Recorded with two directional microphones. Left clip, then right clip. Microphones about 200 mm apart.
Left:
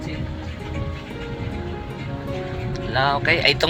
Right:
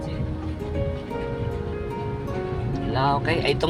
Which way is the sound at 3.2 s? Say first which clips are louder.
Left 5 dB; 20° right (ahead or behind).